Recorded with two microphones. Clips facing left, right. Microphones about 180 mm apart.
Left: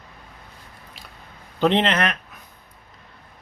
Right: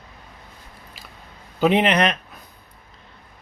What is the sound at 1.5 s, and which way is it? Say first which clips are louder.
Speech: right 2 dB; 10° right (ahead or behind).